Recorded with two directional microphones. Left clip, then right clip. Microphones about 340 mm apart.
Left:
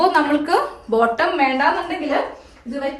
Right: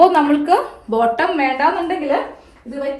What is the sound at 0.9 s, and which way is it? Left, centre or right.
Speech, right.